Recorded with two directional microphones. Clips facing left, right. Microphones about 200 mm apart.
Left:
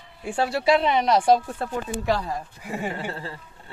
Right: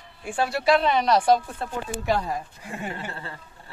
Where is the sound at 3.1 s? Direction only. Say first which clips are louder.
Left 3 dB; 30° left (ahead or behind).